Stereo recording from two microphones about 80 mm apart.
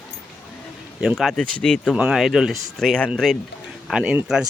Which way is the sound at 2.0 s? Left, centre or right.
Centre.